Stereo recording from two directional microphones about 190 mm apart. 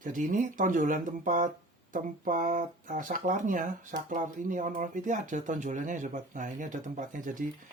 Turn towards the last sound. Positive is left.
turn(degrees=-45)  # may be behind; listen again after turning